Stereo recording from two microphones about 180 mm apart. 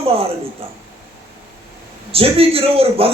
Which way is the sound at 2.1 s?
30° right (ahead or behind).